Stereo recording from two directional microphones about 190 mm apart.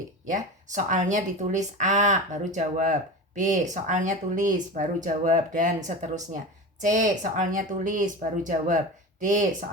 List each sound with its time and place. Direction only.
0.3 s speech: 40° right (ahead or behind)